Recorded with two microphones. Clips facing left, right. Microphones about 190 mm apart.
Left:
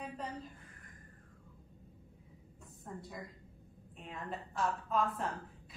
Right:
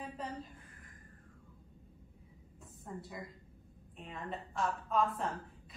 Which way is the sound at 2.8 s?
Centre (ahead or behind).